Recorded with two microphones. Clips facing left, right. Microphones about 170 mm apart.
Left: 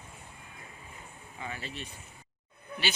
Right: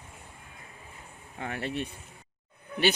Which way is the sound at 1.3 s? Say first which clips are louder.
Right 8 dB; 65° right (ahead or behind).